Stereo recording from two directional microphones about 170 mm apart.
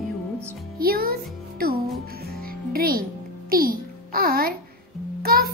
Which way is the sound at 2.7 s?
60° right (ahead or behind).